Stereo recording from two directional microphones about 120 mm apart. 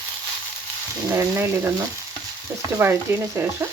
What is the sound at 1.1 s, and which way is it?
Frying, 20° right (ahead or behind).